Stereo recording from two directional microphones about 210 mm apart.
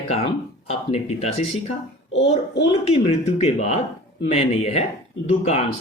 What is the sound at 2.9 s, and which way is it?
Speech, 30° left (ahead or behind).